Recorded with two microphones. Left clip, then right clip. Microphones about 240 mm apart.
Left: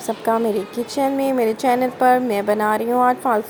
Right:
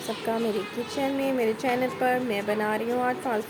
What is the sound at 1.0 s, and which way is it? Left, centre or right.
Speech, centre.